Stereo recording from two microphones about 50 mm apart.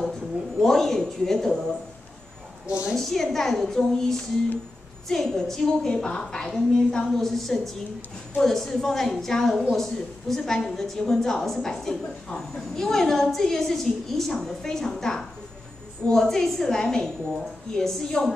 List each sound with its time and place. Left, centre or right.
0.0 s speech: centre
3.0 s a woman's voice: centre